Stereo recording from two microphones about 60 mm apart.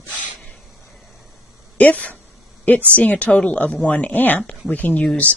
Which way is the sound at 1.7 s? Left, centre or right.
Left.